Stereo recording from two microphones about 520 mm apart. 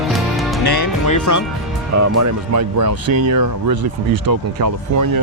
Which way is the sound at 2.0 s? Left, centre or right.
Right.